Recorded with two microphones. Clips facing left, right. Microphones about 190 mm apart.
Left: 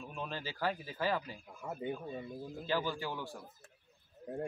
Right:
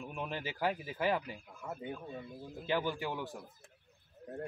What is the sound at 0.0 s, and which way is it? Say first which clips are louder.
Speech: right 2 dB; 15° right (ahead or behind).